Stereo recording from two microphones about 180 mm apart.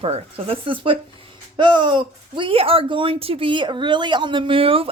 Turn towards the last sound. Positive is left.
turn(degrees=-30)  # may be behind; listen again after turning